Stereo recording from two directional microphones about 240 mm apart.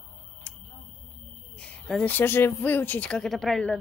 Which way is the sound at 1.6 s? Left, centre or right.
Centre.